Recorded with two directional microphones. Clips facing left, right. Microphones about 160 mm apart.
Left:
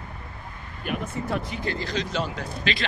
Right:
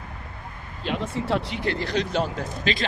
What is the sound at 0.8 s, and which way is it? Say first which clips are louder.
Speech: right 3 dB; 75° right (ahead or behind).